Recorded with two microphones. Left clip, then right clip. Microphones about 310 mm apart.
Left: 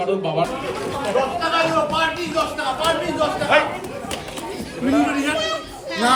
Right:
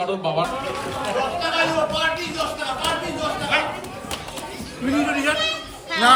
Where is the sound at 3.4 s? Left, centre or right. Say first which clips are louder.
Left 5 dB; centre.